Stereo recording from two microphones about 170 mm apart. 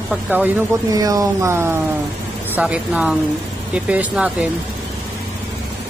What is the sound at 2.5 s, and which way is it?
Speech, 5° right (ahead or behind).